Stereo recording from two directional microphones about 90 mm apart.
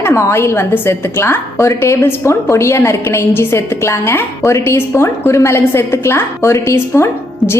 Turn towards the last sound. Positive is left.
turn(degrees=25)  # may be behind; listen again after turning